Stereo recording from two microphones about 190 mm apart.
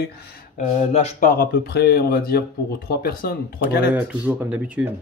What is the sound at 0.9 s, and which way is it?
Speech, 40° left (ahead or behind).